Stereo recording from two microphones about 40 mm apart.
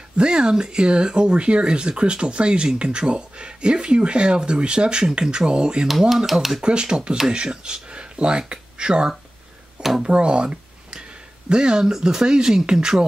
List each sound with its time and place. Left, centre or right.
0.2 s speech: right
5.9 s speech: centre
6.6 s speech: right